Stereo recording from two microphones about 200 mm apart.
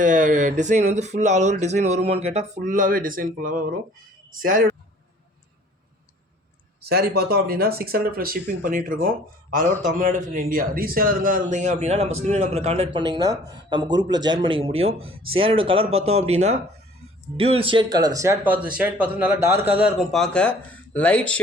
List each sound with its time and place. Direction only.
0.0 s speech: 40° right (ahead or behind)
6.8 s speech: 50° right (ahead or behind); by 21.3 s 5° left (ahead or behind)